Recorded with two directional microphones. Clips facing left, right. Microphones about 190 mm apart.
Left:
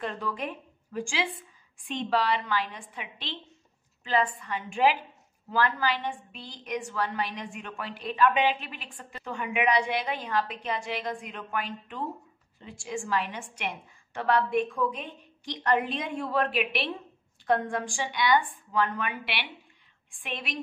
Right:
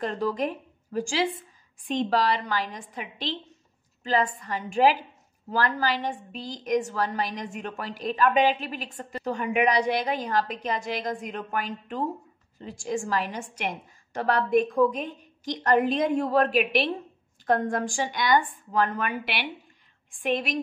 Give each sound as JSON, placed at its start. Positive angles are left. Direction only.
{"t": 0.0, "sound": "a woman's voice", "side_deg": -40}